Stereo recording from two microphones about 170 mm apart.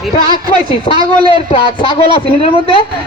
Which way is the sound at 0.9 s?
40° left (ahead or behind).